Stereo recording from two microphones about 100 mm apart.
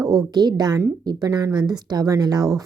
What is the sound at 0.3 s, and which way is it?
Speech, 40° right (ahead or behind).